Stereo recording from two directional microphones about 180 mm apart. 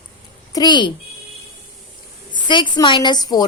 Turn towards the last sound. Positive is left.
turn(degrees=20)  # may be behind; listen again after turning